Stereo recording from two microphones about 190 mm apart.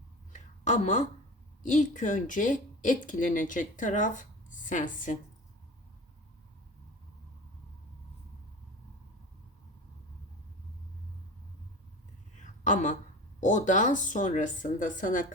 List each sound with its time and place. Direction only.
0.6 s speech: 40° left (ahead or behind)
12.4 s a sound: 40° left (ahead or behind)
13.4 s a woman's voice: 40° left (ahead or behind)